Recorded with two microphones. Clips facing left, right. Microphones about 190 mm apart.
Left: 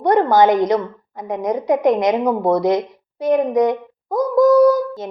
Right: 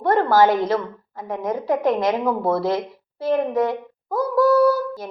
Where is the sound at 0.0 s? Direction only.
20° left (ahead or behind).